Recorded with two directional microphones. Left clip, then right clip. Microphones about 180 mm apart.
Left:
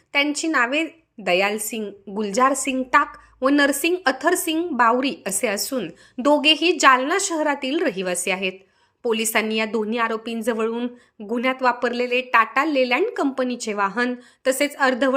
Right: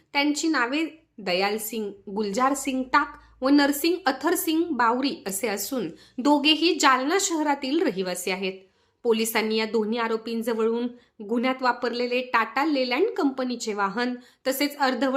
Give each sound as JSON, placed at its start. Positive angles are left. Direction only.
{"t": 0.1, "sound": "a woman's voice", "side_deg": 15}